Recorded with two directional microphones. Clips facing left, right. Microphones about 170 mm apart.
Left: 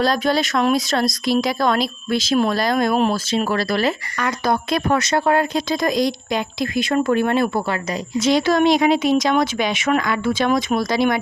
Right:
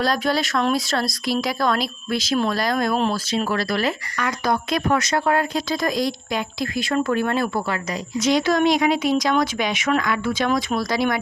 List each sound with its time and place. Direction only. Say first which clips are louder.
0.0 s speech: left 3 dB; 25° left (ahead or behind)